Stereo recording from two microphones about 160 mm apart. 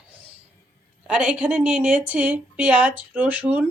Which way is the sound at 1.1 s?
5° right (ahead or behind).